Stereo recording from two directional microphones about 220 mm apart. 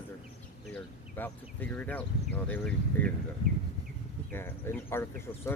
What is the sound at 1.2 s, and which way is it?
Speech, 10° left (ahead or behind).